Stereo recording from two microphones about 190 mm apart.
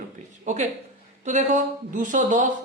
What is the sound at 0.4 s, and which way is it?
A man's voice, 35° right (ahead or behind).